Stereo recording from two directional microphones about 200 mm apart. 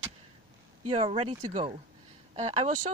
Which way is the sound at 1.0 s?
25° right (ahead or behind).